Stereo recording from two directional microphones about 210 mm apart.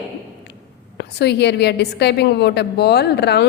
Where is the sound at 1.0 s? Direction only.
50° left (ahead or behind).